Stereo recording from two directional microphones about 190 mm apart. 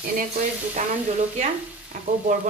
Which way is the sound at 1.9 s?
45° right (ahead or behind).